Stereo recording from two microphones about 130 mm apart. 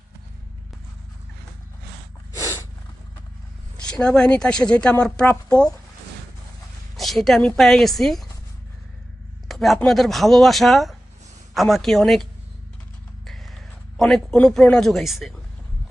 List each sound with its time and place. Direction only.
2.3 s snort: 25° left (ahead or behind)
3.8 s a woman's voice: 5° left (ahead or behind)
6.9 s speech: centre (ahead or behind)
9.5 s a man's voice: centre (ahead or behind)